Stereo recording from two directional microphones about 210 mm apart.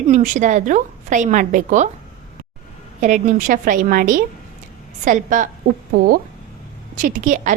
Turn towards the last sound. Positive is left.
turn(degrees=-35)  # may be behind; listen again after turning